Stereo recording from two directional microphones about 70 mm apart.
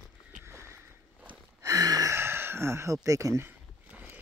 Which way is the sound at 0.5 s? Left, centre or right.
Right.